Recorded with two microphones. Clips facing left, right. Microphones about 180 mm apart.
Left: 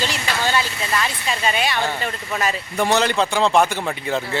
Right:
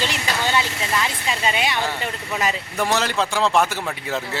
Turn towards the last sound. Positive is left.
turn(degrees=0)  # may be behind; listen again after turning